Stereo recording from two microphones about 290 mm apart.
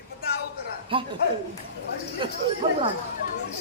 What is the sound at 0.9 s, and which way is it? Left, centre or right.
Speech, centre.